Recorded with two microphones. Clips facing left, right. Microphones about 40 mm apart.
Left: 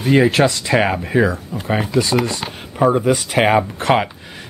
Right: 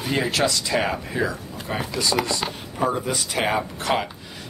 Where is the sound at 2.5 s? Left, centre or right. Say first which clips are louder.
Left 8 dB; left.